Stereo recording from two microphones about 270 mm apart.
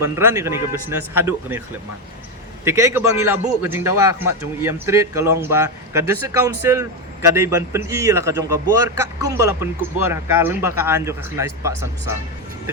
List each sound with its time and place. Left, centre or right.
0.0 s a man's voice: centre
2.6 s a man's voice: centre